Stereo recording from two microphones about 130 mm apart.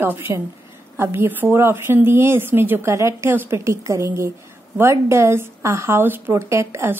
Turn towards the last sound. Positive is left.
turn(degrees=-20)  # may be behind; listen again after turning